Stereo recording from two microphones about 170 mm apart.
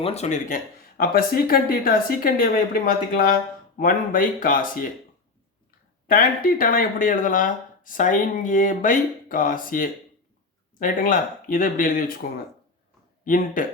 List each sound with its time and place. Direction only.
0.0 s speech: 40° left (ahead or behind); by 4.8 s 55° left (ahead or behind)
6.1 s speech: 55° left (ahead or behind)
13.2 s speech: 50° left (ahead or behind)